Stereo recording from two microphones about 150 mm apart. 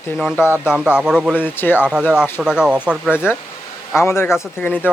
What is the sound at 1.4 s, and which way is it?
Speech, 15° left (ahead or behind).